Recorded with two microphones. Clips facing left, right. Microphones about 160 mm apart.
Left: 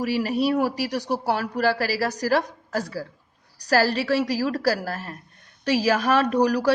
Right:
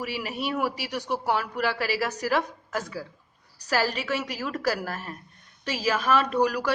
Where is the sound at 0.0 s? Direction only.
40° left (ahead or behind).